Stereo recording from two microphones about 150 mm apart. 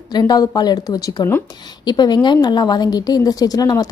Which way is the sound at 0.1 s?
25° left (ahead or behind).